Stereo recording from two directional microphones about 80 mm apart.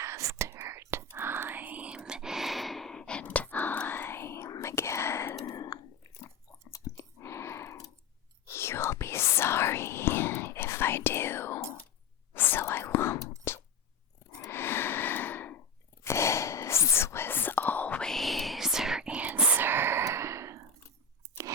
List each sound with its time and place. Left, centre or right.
0.0 s whispering: right; by 5.4 s left
5.5 s whispering: left
6.7 s chewing: left
8.4 s whispering: left
13.5 s a sound: left
16.0 s whispering: left
18.0 s whispering: centre; by 20.6 s right